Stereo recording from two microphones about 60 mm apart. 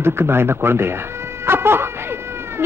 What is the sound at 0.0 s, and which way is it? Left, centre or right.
Speech, right.